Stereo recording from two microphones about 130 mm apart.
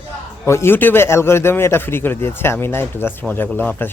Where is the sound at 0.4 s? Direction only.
20° left (ahead or behind).